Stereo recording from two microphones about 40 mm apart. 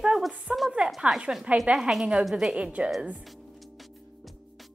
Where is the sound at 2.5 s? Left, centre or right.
Right.